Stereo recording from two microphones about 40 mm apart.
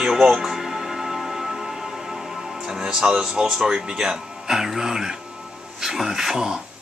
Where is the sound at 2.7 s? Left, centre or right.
Centre.